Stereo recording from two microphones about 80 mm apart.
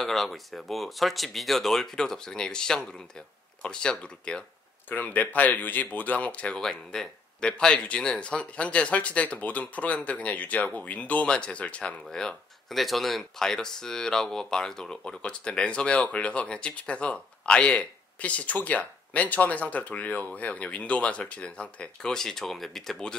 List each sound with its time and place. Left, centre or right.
0.0 s speech: centre